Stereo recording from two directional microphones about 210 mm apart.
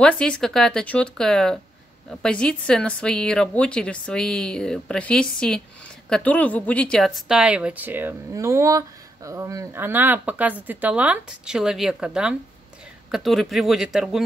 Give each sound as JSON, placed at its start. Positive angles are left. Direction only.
{"t": 0.0, "sound": "a woman's voice", "side_deg": 5}